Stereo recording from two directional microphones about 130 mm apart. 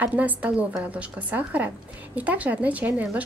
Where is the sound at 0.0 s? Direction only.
10° right (ahead or behind).